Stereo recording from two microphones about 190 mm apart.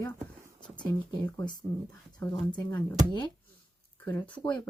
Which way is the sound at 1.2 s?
10° left (ahead or behind).